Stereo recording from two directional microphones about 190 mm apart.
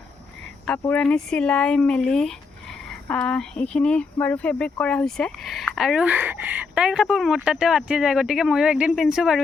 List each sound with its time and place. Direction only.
0.7 s speech: 5° left (ahead or behind)